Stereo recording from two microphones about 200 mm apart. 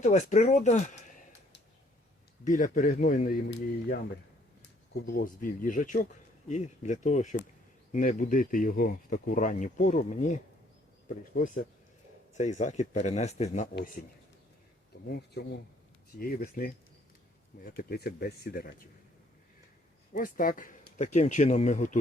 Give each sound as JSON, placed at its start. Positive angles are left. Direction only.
{"t": 0.0, "sound": "speech", "side_deg": 35}
{"t": 2.4, "sound": "speech", "side_deg": 40}
{"t": 5.0, "sound": "speech", "side_deg": 45}
{"t": 11.3, "sound": "speech", "side_deg": 40}
{"t": 14.9, "sound": "a sound", "side_deg": 55}
{"t": 15.4, "sound": "speech", "side_deg": 50}
{"t": 20.1, "sound": "speech", "side_deg": 45}